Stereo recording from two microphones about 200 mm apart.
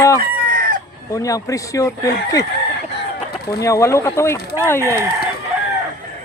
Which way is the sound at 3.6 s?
15° left (ahead or behind).